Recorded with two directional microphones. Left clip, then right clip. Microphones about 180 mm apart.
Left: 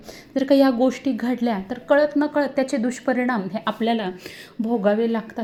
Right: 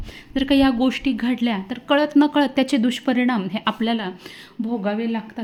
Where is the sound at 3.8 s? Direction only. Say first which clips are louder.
Left 1 dB; 10° right (ahead or behind).